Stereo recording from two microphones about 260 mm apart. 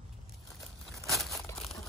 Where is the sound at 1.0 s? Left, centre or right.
Centre.